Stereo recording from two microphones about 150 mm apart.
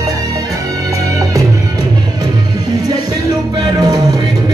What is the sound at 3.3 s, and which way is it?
Music, 25° right (ahead or behind).